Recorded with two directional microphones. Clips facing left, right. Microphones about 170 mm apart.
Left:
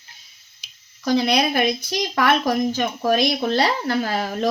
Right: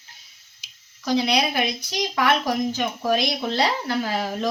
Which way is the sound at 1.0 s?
50° left (ahead or behind).